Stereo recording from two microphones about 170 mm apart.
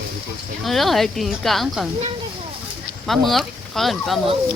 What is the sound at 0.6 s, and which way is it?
Speech, centre (ahead or behind).